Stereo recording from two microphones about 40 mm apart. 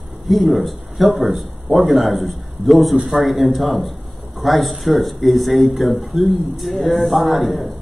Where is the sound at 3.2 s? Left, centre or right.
Centre.